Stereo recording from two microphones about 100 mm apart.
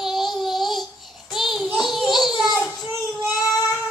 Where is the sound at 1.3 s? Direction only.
Centre (ahead or behind).